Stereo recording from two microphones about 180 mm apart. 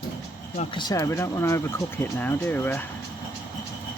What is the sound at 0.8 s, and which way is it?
Speech, 20° left (ahead or behind).